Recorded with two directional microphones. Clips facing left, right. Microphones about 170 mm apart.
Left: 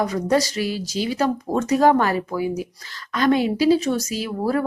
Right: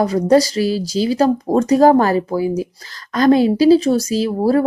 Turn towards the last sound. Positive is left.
turn(degrees=-35)  # may be behind; listen again after turning